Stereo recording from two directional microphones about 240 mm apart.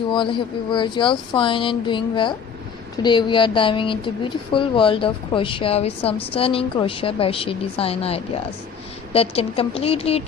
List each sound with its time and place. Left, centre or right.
0.1 s a woman's voice: centre